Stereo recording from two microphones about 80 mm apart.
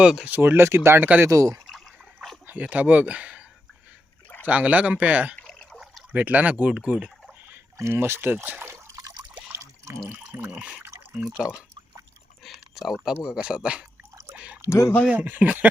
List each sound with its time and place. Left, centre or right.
0.0 s speech: centre
0.3 s speech: right
1.3 s speech: right
2.5 s speech: centre
4.4 s speech: centre
7.5 s speech: right
9.0 s liquid: right
9.5 s water: right
10.6 s speech: centre
12.4 s speech: centre
14.3 s a sound: centre
14.7 s speech: left
15.1 s speech: right